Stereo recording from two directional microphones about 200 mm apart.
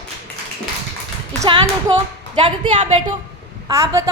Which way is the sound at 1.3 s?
25° right (ahead or behind).